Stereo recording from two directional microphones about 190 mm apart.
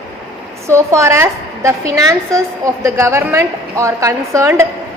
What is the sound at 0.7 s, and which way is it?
A woman's voice, 15° right (ahead or behind).